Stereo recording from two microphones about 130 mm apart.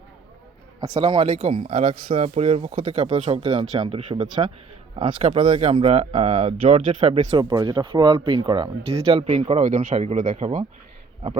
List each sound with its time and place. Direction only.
0.9 s speech: 45° right (ahead or behind)
7.3 s speech: 35° right (ahead or behind)
8.8 s speech: 50° right (ahead or behind); by 10.6 s 85° right